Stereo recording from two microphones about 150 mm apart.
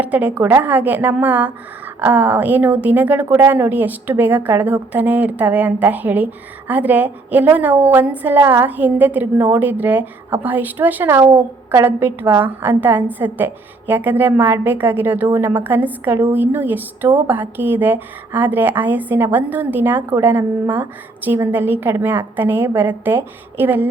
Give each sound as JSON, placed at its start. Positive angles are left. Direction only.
{"t": 0.0, "sound": "a woman's voice", "side_deg": -10}